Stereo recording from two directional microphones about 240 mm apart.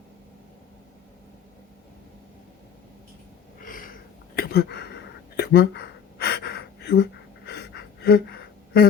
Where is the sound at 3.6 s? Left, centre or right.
Left.